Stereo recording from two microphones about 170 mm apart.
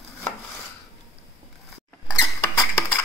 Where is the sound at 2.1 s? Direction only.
20° left (ahead or behind).